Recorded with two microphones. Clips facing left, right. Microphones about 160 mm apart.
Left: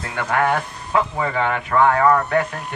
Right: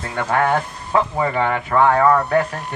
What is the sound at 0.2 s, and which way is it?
Speech, 30° right (ahead or behind).